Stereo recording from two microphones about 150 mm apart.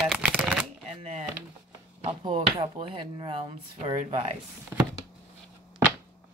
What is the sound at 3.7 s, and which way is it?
Speech, 45° right (ahead or behind).